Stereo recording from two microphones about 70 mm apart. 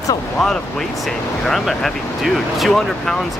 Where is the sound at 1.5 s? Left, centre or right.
Centre.